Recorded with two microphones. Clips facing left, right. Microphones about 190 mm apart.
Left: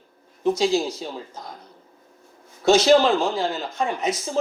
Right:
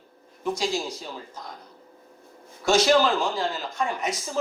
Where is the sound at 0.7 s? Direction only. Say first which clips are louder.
Left 7 dB; 25° left (ahead or behind).